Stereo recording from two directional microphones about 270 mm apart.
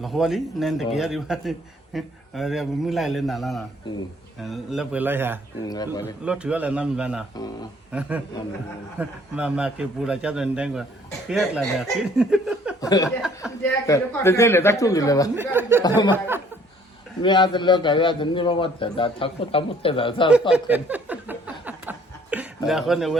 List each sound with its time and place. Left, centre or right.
0.0 s a man's voice: centre
5.6 s a man's voice: centre
6.2 s a man's voice: centre
9.0 s a man's voice: centre
12.8 s a sound: centre
13.1 s a man's voice: centre
13.8 s a man's voice: centre
15.4 s speech: centre
17.2 s a man's voice: centre
20.5 s chuckle: centre